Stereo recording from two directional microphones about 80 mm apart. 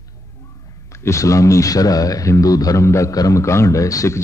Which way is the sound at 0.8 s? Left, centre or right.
Left.